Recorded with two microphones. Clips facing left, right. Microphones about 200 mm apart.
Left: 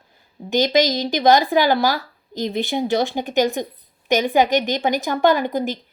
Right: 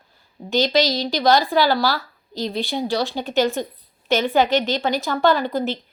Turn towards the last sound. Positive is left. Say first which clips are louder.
# left 1 dB
turn(degrees=15)  # may be behind; listen again after turning